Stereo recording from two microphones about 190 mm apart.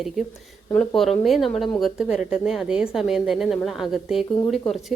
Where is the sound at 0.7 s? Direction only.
5° left (ahead or behind).